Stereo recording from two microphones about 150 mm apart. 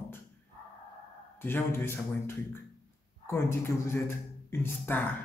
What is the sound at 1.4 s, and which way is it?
Speech, 15° left (ahead or behind).